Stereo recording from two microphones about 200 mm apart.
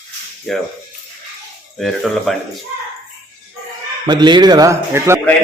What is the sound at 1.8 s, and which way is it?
Speech, centre (ahead or behind).